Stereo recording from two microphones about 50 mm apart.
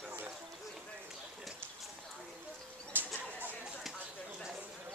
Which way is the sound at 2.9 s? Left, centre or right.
Right.